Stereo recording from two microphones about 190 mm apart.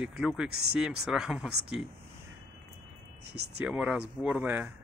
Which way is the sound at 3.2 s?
60° right (ahead or behind).